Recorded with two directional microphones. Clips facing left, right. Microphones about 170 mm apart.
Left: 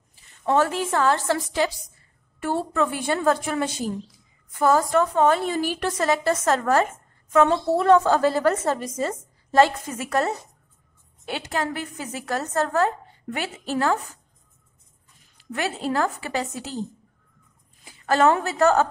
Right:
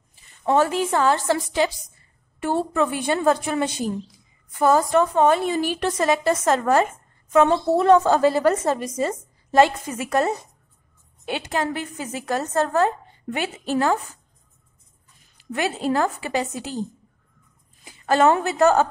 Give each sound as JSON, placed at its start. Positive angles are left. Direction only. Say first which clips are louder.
{"t": 0.1, "sound": "a woman's voice", "louder": "right 2 dB", "side_deg": -15}
{"t": 15.5, "sound": "a woman's voice", "louder": "right 3 dB", "side_deg": -20}
{"t": 17.8, "sound": "a woman's voice", "louder": "right 1 dB", "side_deg": -20}